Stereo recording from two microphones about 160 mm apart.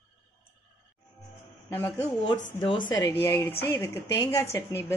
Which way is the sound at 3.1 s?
15° left (ahead or behind).